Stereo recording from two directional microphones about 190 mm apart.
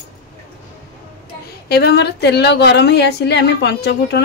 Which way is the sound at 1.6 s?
60° left (ahead or behind).